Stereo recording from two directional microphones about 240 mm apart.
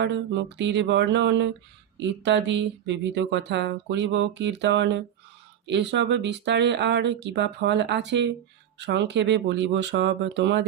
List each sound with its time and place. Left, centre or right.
0.0 s speech: right